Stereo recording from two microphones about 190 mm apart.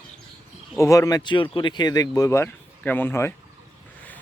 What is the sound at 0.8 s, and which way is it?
Speech, 15° left (ahead or behind).